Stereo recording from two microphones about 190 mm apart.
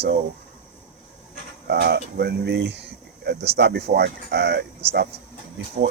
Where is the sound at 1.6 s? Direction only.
60° right (ahead or behind).